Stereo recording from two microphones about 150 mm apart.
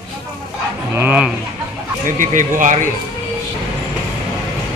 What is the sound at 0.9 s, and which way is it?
Speech, 10° right (ahead or behind).